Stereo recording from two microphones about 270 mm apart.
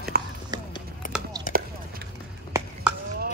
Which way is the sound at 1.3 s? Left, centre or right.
Centre.